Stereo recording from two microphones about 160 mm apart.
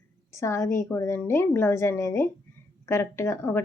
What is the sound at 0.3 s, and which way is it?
Speech, 20° left (ahead or behind).